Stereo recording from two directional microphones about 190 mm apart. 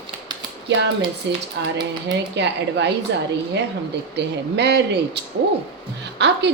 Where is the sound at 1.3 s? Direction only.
70° right (ahead or behind).